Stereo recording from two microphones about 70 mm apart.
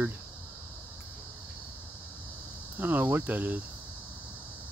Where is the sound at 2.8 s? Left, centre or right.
Right.